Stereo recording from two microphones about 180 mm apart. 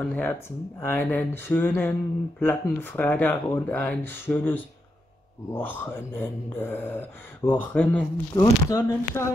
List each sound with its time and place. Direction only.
0.0 s mantra: 10° left (ahead or behind)
8.4 s speech: 20° left (ahead or behind)